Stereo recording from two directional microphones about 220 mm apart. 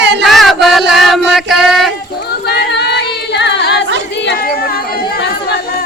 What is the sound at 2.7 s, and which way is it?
Music, 50° left (ahead or behind).